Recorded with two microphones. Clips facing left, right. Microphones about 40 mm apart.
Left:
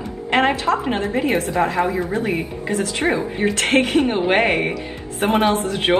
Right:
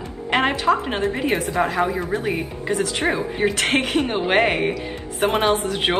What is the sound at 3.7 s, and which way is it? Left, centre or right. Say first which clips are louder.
A woman's voice: left 4 dB; centre.